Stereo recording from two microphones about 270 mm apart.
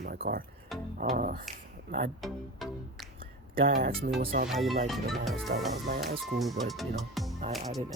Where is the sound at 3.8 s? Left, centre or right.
Right.